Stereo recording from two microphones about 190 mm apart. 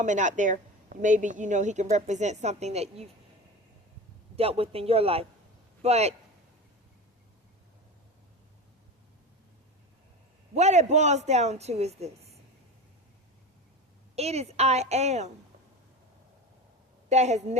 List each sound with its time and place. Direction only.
0.0 s speech: 40° right (ahead or behind)
4.4 s speech: 30° right (ahead or behind)
10.5 s speech: 35° right (ahead or behind)
14.2 s speech: 35° right (ahead or behind)
17.1 s speech: 35° right (ahead or behind)